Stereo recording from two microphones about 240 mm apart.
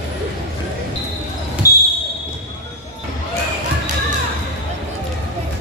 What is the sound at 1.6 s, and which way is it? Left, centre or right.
Basketball bounce, left.